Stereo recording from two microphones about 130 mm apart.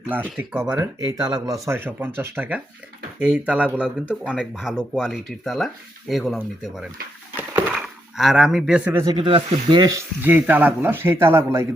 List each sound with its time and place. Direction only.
0.1 s speech: 15° right (ahead or behind)
7.3 s a sound: 10° right (ahead or behind)
8.9 s speech: 20° right (ahead or behind)
9.1 s speech: 40° right (ahead or behind)
10.2 s speech: 15° right (ahead or behind)